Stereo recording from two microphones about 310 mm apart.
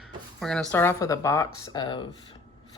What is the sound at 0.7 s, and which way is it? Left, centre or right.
Speech, centre.